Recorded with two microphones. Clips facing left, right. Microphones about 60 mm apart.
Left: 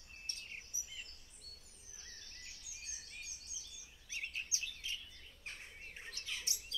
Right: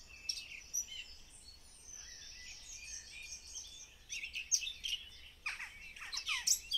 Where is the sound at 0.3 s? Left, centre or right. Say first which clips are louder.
Right 1 dB; left.